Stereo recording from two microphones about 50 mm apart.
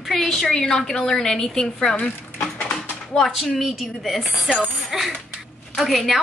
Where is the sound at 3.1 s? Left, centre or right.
Centre.